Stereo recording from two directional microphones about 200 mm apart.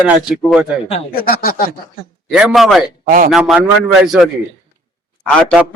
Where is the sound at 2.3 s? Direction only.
5° right (ahead or behind).